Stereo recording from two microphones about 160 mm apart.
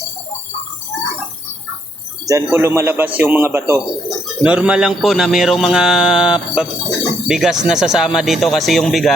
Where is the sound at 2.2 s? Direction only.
20° right (ahead or behind).